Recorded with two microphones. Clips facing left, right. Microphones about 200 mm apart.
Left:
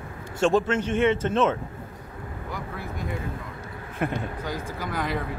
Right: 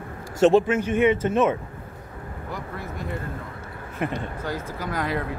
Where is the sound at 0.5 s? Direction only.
10° right (ahead or behind).